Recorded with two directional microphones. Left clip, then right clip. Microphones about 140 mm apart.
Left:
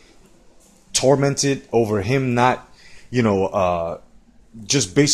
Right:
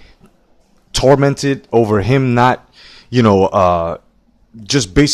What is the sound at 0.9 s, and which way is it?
Speech, 55° right (ahead or behind).